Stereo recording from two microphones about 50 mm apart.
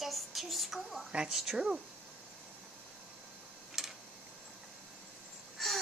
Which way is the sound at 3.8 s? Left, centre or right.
Centre.